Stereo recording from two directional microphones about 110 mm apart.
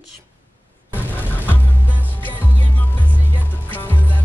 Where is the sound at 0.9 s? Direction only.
15° left (ahead or behind).